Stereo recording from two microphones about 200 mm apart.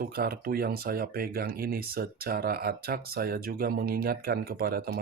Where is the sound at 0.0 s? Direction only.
50° right (ahead or behind).